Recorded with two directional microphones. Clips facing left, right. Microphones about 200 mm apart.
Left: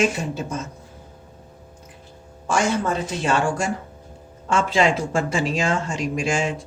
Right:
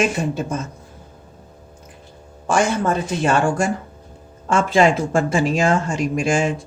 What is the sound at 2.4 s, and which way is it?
A woman's voice, 55° right (ahead or behind).